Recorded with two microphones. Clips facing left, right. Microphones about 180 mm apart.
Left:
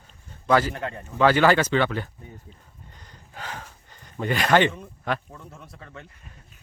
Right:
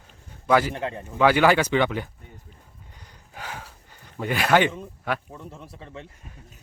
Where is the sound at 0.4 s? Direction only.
10° right (ahead or behind).